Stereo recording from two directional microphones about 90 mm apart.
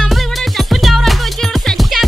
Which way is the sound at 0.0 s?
Centre (ahead or behind).